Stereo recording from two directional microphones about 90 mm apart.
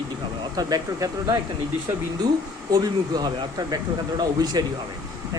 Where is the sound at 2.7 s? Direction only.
45° right (ahead or behind).